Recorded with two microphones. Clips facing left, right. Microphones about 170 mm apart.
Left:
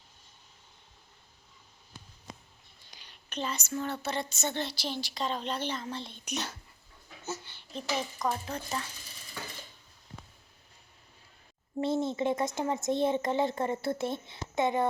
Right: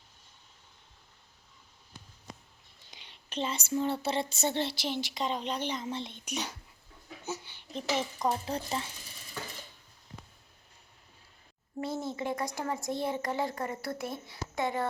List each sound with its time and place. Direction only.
2.9 s a child's voice: 25° right (ahead or behind)
8.2 s speech: 30° right (ahead or behind)
11.8 s a child's voice: 25° left (ahead or behind)